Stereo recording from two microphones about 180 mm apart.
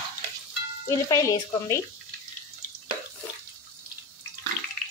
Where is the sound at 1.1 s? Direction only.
20° left (ahead or behind).